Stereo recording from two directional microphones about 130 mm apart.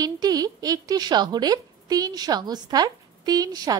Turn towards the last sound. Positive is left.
turn(degrees=-30)  # may be behind; listen again after turning